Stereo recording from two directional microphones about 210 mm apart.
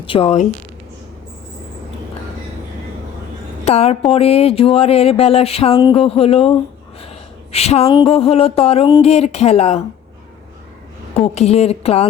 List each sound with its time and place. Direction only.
0.0 s speech: 25° left (ahead or behind)
3.6 s speech: 30° left (ahead or behind)
7.5 s speech: 30° left (ahead or behind)
11.3 s speech: 30° left (ahead or behind)